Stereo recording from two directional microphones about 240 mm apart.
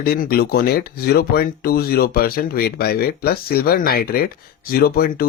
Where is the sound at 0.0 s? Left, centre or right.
Left.